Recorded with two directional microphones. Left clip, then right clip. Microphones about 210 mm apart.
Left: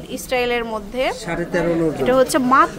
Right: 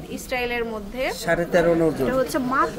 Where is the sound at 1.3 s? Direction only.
15° right (ahead or behind).